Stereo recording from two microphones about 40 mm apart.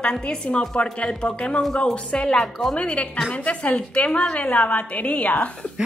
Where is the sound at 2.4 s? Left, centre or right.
Centre.